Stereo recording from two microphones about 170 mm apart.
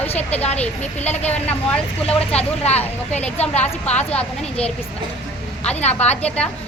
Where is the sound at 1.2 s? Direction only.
10° left (ahead or behind).